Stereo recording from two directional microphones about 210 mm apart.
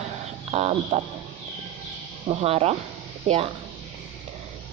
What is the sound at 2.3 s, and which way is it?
Speech, 30° right (ahead or behind).